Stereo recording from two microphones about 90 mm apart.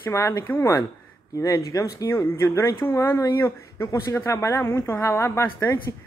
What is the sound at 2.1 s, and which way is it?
A woman's voice, 30° left (ahead or behind).